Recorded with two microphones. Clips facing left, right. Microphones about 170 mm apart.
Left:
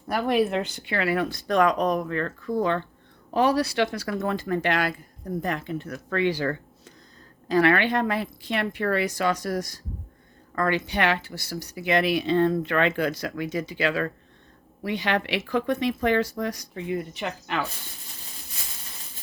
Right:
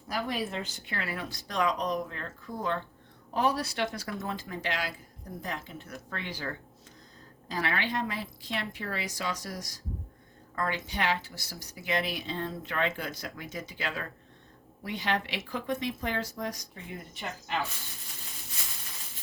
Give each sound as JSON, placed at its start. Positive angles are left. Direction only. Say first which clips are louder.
{"t": 0.1, "sound": "a woman's voice", "louder": "left 10 dB", "side_deg": 65}
{"t": 10.5, "sound": "speech", "louder": "left 8 dB", "side_deg": 75}
{"t": 14.8, "sound": "speech", "louder": "left 6 dB", "side_deg": 75}